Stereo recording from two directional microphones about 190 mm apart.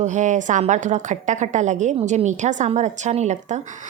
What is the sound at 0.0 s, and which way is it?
A woman's voice, 40° right (ahead or behind).